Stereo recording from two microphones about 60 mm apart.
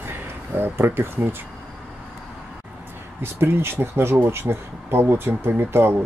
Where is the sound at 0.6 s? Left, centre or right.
Right.